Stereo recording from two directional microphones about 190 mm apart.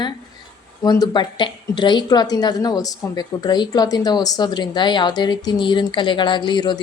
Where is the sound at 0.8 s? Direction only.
20° left (ahead or behind).